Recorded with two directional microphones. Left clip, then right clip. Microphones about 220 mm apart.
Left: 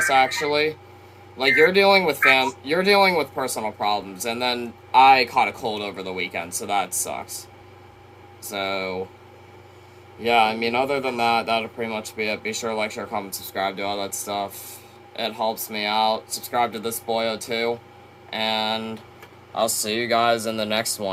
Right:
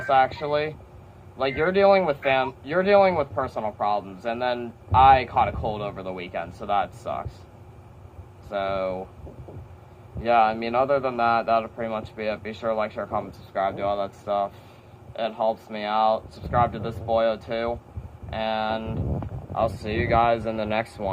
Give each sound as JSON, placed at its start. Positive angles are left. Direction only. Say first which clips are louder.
{"t": 0.1, "sound": "speech", "louder": "left 2 dB", "side_deg": 15}
{"t": 8.5, "sound": "speech", "louder": "even", "side_deg": 15}
{"t": 10.2, "sound": "speech", "louder": "left 1 dB", "side_deg": 10}